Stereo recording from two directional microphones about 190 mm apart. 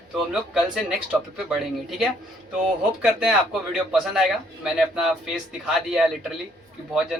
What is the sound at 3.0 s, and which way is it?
Speech, 5° right (ahead or behind).